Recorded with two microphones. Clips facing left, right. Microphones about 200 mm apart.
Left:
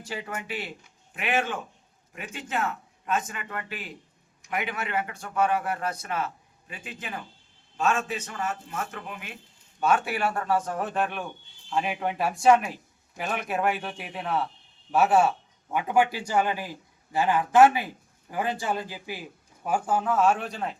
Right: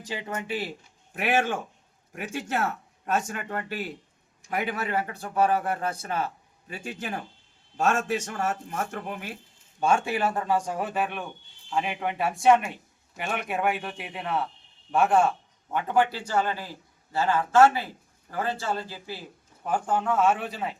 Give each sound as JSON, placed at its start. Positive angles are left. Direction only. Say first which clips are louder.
{"t": 0.0, "sound": "speech", "louder": "right 1 dB", "side_deg": -20}
{"t": 0.3, "sound": "a man's voice", "louder": "right 3 dB", "side_deg": -30}
{"t": 1.1, "sound": "a man's voice", "louder": "right 3 dB", "side_deg": -45}
{"t": 9.8, "sound": "a man's voice", "louder": "right 1 dB", "side_deg": -25}